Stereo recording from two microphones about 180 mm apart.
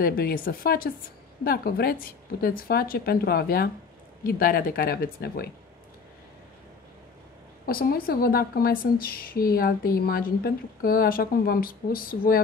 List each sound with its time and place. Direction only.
0.0 s a woman's voice: 55° left (ahead or behind)
7.6 s a woman's voice: 55° left (ahead or behind)